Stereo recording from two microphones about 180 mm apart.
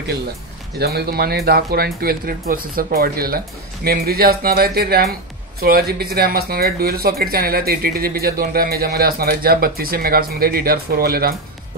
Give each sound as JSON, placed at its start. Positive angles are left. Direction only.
{"t": 0.7, "sound": "speech", "side_deg": -60}